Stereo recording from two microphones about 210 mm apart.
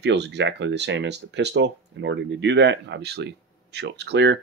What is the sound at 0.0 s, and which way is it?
Speech, 55° right (ahead or behind).